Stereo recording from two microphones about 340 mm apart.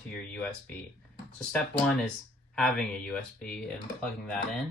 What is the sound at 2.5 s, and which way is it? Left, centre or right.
Speech, centre.